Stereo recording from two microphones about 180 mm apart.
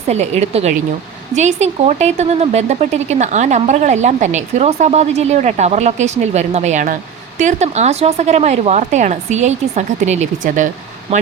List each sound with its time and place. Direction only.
0.1 s speech: 40° right (ahead or behind)